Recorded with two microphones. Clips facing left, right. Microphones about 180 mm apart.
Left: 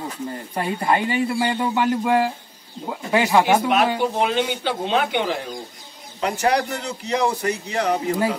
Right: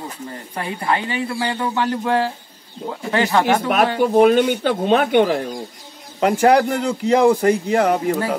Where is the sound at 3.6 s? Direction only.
50° right (ahead or behind).